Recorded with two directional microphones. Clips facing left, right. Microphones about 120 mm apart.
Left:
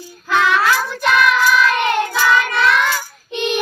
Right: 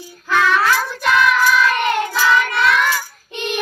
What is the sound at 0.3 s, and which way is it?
Child singing, 15° left (ahead or behind).